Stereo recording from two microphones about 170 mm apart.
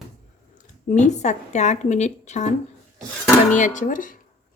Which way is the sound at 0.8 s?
45° left (ahead or behind).